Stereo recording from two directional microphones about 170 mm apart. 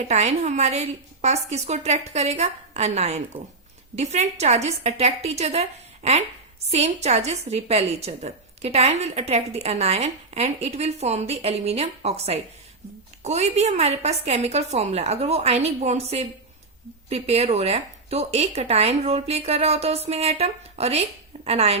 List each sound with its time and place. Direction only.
0.1 s a woman's voice: 40° right (ahead or behind)